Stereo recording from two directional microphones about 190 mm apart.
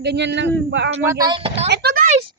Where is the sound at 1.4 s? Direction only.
30° right (ahead or behind).